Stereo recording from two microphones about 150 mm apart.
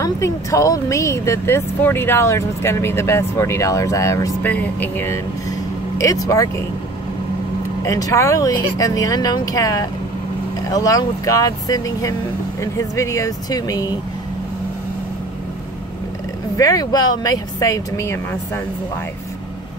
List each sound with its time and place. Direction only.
0.0 s a woman's voice: 20° left (ahead or behind)
7.8 s a woman's voice: 20° left (ahead or behind)
16.5 s a woman's voice: 25° left (ahead or behind)